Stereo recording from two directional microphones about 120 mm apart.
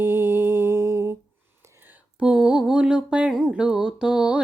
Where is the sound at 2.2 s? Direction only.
5° right (ahead or behind).